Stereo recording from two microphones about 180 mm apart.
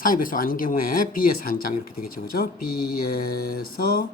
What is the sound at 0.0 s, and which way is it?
Speech, 50° left (ahead or behind).